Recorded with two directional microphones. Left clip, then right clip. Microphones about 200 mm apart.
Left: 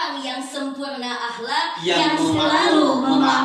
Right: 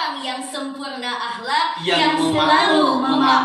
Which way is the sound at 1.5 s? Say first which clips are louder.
Right 2 dB; 20° right (ahead or behind).